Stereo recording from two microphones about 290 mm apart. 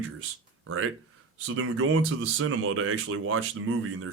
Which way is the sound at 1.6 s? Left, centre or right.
Right.